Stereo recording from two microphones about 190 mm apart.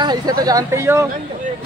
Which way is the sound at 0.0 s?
20° right (ahead or behind).